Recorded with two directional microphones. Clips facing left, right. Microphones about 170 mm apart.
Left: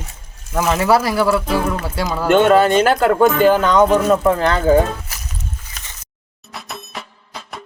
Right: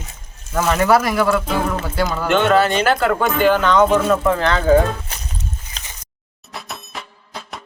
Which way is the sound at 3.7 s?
10° left (ahead or behind).